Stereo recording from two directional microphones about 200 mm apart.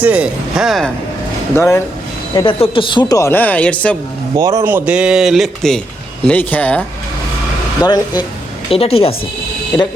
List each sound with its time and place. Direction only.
0.0 s speech: 5° right (ahead or behind)
1.5 s speech: 10° left (ahead or behind)
2.3 s speech: 25° left (ahead or behind); by 3.9 s 5° left (ahead or behind)
4.4 s speech: 15° right (ahead or behind); by 6.8 s 5° left (ahead or behind)
7.9 s speech: 20° left (ahead or behind)